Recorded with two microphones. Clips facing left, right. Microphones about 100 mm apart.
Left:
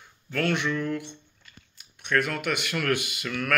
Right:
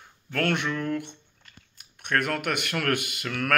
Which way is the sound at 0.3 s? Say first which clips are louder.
Even; 50° right (ahead or behind).